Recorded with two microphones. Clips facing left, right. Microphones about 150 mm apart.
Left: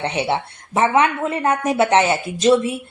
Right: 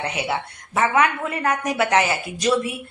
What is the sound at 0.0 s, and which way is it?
A woman's voice, 30° left (ahead or behind).